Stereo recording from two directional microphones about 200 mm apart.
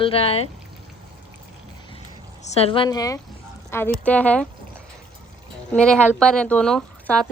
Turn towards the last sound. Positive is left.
turn(degrees=0)  # may be behind; listen again after turning